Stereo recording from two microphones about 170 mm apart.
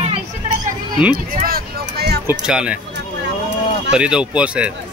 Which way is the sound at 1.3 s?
60° right (ahead or behind).